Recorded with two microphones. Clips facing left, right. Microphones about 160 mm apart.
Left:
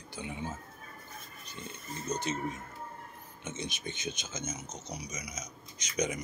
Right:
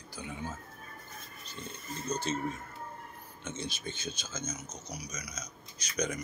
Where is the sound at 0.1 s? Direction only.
25° left (ahead or behind).